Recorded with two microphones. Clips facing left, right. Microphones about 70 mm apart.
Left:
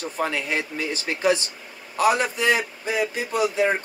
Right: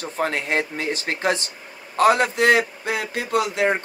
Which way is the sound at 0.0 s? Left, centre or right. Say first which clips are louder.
Right 2 dB; right.